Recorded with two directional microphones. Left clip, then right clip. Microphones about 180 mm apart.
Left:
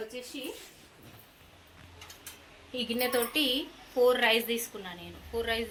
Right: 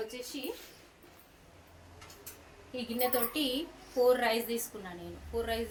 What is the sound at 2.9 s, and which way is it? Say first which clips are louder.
Speech: left 3 dB; 30° left (ahead or behind).